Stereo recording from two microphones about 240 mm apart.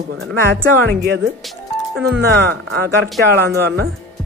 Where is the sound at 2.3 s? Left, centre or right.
Right.